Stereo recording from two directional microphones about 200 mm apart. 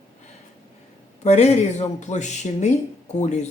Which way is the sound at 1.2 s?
35° left (ahead or behind).